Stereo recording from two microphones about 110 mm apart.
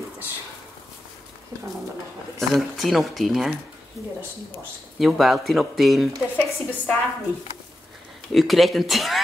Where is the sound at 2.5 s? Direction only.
Centre (ahead or behind).